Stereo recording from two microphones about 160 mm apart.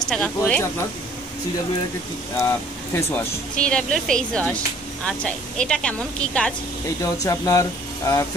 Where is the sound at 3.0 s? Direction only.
15° left (ahead or behind).